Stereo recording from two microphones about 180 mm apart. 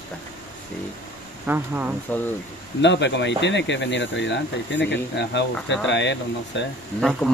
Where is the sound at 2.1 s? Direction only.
10° left (ahead or behind).